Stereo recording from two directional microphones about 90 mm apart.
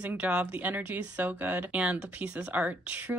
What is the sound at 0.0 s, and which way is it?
Speech, 15° right (ahead or behind).